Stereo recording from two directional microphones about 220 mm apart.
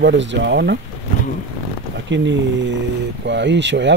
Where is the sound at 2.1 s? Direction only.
55° right (ahead or behind).